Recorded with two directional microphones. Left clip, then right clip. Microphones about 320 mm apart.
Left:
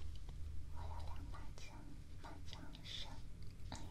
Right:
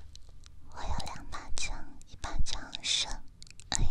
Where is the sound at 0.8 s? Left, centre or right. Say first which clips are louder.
Right 15 dB; right.